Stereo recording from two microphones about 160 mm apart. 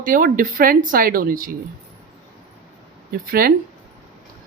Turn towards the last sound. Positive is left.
turn(degrees=-70)  # may be behind; listen again after turning